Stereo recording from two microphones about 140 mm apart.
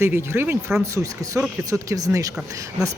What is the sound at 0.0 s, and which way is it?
Speech, 15° right (ahead or behind).